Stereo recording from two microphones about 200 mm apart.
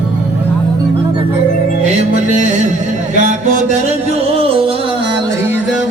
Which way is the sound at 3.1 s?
40° right (ahead or behind).